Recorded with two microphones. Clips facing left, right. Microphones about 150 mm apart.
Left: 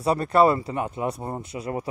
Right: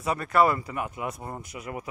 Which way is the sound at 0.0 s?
30° left (ahead or behind).